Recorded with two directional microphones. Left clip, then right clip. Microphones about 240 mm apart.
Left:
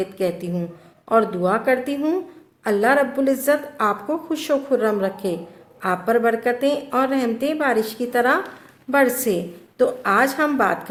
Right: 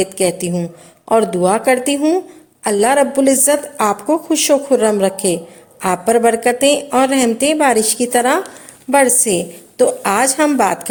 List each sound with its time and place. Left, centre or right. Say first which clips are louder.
0.0 s a woman's voice: right 7 dB; right